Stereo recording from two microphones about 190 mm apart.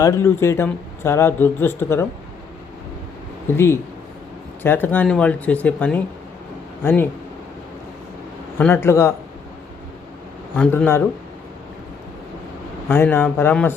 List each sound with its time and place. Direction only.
0.0 s speech: 15° left (ahead or behind)
3.5 s speech: 15° left (ahead or behind)
8.5 s speech: 10° left (ahead or behind)
10.6 s speech: 10° left (ahead or behind)
12.9 s speech: 10° left (ahead or behind)